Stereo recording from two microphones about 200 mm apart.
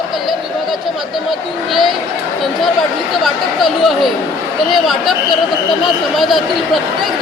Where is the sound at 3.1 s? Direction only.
Centre (ahead or behind).